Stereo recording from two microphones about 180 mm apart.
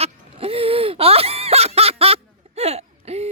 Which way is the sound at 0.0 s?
35° right (ahead or behind).